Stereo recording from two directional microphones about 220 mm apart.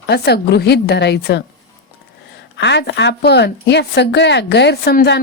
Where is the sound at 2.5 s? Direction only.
50° left (ahead or behind).